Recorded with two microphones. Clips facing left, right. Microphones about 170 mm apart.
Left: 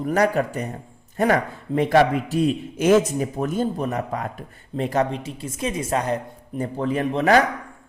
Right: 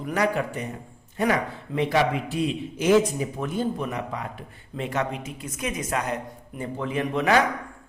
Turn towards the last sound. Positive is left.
turn(degrees=40)  # may be behind; listen again after turning